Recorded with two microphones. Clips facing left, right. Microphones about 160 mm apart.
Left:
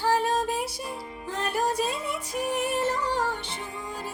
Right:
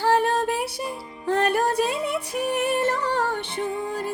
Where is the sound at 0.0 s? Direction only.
60° right (ahead or behind).